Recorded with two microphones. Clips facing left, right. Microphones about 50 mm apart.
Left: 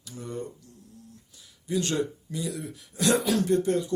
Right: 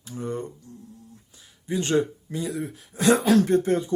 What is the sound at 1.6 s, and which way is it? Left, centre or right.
Speech, right.